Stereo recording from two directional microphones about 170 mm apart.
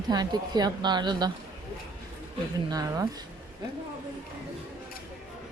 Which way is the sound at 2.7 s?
20° right (ahead or behind).